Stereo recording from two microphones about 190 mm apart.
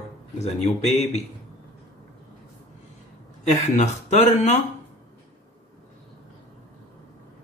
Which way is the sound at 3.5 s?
40° left (ahead or behind).